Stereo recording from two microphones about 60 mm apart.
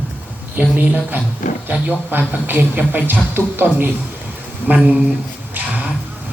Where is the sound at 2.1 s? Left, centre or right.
Right.